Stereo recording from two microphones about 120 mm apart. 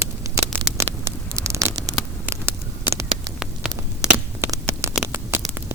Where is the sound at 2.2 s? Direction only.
20° right (ahead or behind).